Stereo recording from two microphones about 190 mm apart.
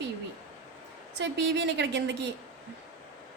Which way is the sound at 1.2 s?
65° right (ahead or behind).